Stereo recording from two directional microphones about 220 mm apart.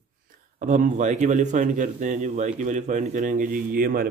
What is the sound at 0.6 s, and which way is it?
Speech, 35° right (ahead or behind).